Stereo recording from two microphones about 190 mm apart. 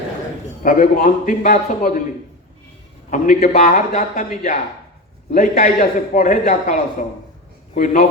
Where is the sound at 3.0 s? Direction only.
45° left (ahead or behind).